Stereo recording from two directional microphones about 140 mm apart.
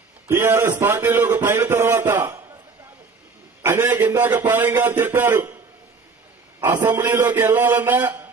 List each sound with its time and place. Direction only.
0.3 s a sound: 15° right (ahead or behind)
3.6 s a man's voice: 15° right (ahead or behind)
6.6 s a man's voice: 15° right (ahead or behind)